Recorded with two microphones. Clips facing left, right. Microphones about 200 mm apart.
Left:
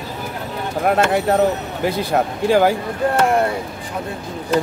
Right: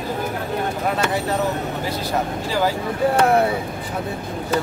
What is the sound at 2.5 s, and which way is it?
Speech, 55° left (ahead or behind).